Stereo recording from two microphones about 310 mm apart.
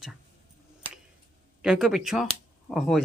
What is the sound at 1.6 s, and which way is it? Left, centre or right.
Speech, centre.